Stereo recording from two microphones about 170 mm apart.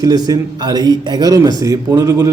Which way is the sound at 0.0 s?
20° right (ahead or behind).